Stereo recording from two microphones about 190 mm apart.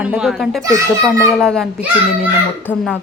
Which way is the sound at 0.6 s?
15° right (ahead or behind).